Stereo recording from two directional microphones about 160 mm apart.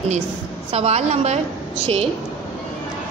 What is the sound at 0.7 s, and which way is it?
Speech, 40° right (ahead or behind).